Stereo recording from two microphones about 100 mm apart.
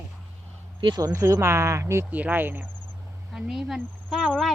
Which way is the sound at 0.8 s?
50° right (ahead or behind).